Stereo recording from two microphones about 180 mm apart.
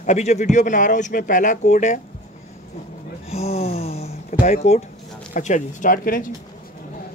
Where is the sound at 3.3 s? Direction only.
35° left (ahead or behind).